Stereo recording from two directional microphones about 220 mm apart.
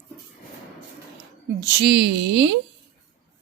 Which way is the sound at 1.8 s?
50° right (ahead or behind).